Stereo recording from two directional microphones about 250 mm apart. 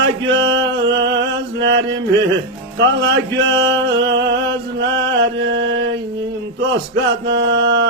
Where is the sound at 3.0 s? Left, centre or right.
Right.